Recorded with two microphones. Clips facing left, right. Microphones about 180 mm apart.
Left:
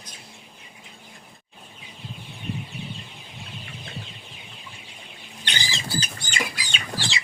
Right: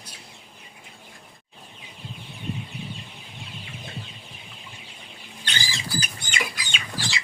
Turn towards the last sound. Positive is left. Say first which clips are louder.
# left 1 dB
turn(degrees=25)  # may be behind; listen again after turning